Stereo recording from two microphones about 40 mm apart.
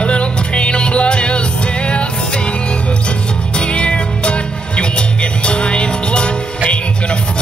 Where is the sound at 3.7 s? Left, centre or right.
Left.